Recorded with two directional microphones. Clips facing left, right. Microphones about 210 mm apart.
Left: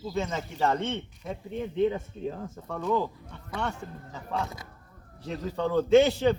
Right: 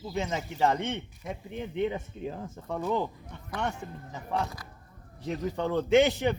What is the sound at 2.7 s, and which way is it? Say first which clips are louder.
Speech: left 1 dB; 10° right (ahead or behind).